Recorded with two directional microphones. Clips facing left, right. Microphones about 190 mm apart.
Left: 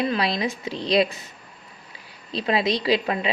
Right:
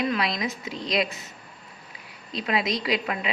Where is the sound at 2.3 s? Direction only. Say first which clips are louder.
Left 4 dB; 30° left (ahead or behind).